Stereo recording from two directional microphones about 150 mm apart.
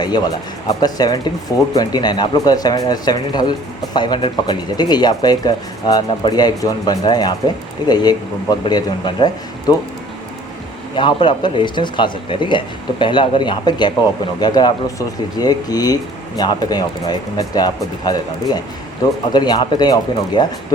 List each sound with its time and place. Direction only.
0.0 s speech: 30° left (ahead or behind)
10.9 s speech: 35° left (ahead or behind)